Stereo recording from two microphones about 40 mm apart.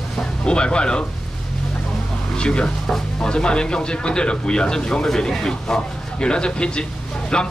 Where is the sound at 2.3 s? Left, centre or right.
Left.